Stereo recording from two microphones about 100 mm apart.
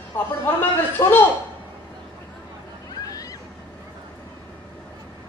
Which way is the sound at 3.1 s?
35° left (ahead or behind).